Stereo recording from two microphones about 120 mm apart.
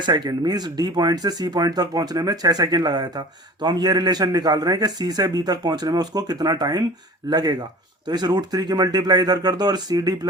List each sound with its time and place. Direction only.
0.0 s speech: 35° right (ahead or behind)